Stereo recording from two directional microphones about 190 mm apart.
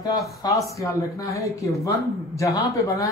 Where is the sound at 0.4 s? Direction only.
15° left (ahead or behind).